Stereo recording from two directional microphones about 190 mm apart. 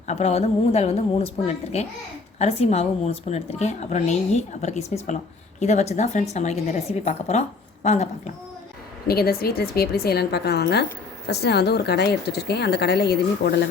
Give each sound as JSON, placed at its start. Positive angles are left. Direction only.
{"t": 0.1, "sound": "a woman's voice", "side_deg": 35}
{"t": 9.0, "sound": "speech", "side_deg": 55}